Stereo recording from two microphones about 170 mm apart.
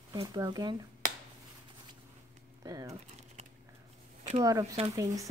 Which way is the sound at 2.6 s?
20° right (ahead or behind).